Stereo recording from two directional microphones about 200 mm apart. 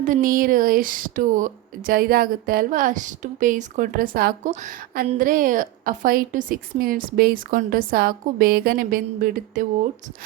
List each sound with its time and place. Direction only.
0.0 s speech: 40° right (ahead or behind)